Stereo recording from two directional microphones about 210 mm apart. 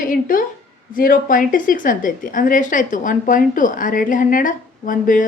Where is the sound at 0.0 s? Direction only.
40° left (ahead or behind).